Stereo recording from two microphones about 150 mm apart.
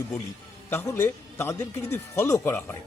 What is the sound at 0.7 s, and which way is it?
Speech, 15° left (ahead or behind).